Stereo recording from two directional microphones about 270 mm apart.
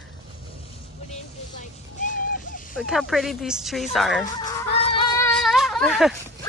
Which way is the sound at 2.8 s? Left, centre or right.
Centre.